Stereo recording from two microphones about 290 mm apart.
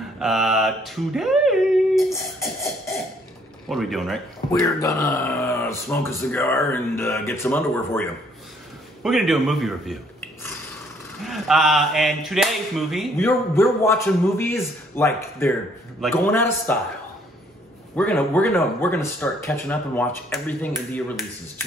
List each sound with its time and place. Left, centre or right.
0.2 s a sound: centre
3.6 s speech: centre
4.5 s speech: centre
11.2 s speech: centre
17.9 s speech: centre